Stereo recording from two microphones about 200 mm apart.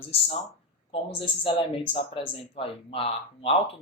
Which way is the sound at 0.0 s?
30° left (ahead or behind).